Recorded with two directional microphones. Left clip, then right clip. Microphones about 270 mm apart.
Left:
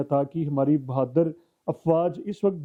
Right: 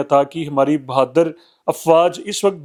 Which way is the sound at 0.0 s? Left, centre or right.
Centre.